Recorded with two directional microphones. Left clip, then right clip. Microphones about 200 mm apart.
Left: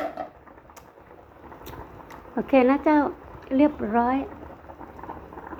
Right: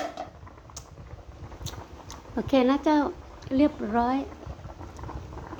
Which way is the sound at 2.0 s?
Centre (ahead or behind).